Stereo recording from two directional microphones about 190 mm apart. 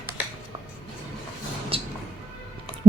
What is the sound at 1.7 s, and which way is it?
Music, 30° right (ahead or behind).